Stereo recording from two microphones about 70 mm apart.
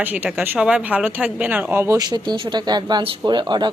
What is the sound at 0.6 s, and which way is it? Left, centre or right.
A woman's voice, centre.